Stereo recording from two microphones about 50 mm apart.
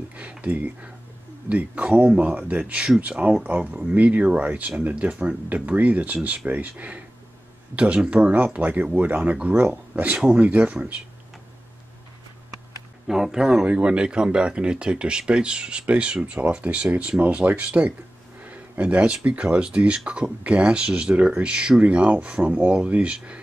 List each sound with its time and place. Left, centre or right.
0.1 s speech: right
13.0 s speech: centre
13.7 s speech: right
16.4 s speech: right
17.2 s speech: right
18.4 s a sound: right
19.2 s speech: right